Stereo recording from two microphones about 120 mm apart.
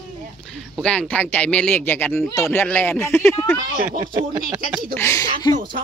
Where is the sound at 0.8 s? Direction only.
10° left (ahead or behind).